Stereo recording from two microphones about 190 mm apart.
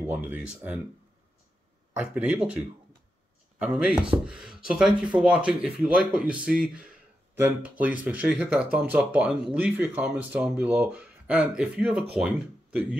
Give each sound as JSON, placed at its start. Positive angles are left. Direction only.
{"t": 0.0, "sound": "speech", "side_deg": -10}
{"t": 2.0, "sound": "speech", "side_deg": -5}